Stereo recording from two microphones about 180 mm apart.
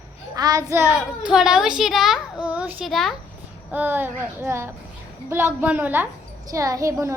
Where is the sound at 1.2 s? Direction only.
5° right (ahead or behind).